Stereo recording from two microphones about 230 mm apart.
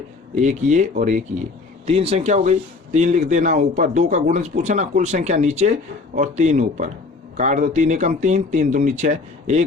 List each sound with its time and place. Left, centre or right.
0.3 s speech: right